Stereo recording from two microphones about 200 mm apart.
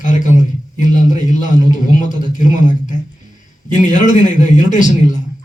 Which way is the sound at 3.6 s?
40° left (ahead or behind).